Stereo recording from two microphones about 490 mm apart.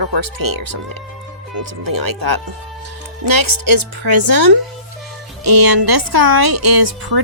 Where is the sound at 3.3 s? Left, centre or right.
Right.